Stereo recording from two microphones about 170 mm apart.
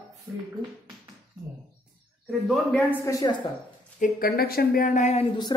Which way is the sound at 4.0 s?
60° left (ahead or behind).